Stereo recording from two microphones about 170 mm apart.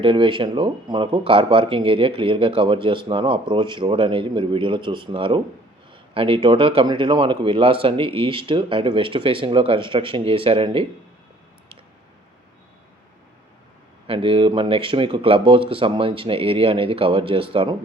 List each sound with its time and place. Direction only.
0.0 s speech: 30° right (ahead or behind)
14.1 s speech: 30° right (ahead or behind)